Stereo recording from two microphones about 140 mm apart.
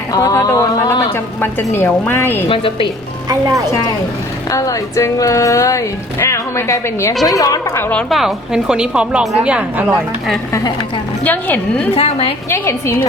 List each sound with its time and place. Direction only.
0.1 s a woman's voice: 25° left (ahead or behind)
2.5 s a woman's voice: 40° left (ahead or behind)
3.2 s speech: 25° right (ahead or behind)
4.5 s speech: 25° left (ahead or behind)
7.9 s a woman's voice: centre (ahead or behind)
11.2 s a woman's voice: 10° left (ahead or behind)
11.9 s a woman's voice: 45° left (ahead or behind)
12.5 s a woman's voice: 20° left (ahead or behind)